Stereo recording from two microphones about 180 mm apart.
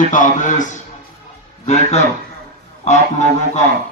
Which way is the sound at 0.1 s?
45° left (ahead or behind).